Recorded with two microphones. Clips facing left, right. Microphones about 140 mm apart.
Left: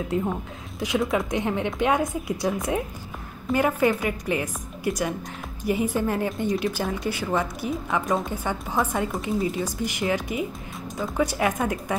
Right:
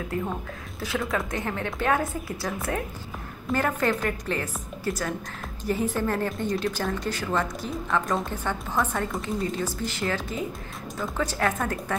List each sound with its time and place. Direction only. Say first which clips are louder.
0.1 s a woman's voice: left 4 dB; 20° left (ahead or behind)